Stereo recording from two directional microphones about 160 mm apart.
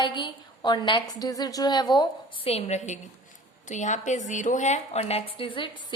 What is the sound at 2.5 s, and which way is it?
A woman's voice, 40° left (ahead or behind).